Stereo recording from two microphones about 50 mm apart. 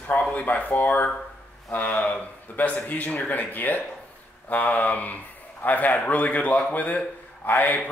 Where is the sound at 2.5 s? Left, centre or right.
Left.